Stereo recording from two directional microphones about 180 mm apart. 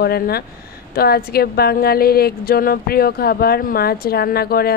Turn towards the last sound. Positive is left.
turn(degrees=60)  # may be behind; listen again after turning